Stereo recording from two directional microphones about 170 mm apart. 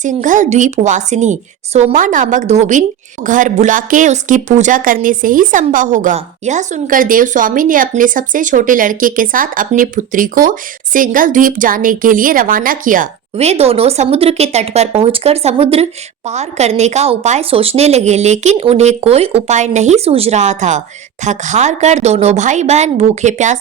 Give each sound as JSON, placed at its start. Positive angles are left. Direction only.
{"t": 0.0, "sound": "a woman's voice", "side_deg": -50}
{"t": 13.3, "sound": "a woman's voice", "side_deg": -35}